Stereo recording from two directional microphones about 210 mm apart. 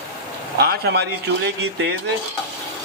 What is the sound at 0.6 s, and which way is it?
Speech, 50° right (ahead or behind).